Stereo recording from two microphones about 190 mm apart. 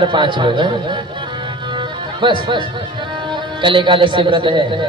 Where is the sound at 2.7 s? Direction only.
25° right (ahead or behind).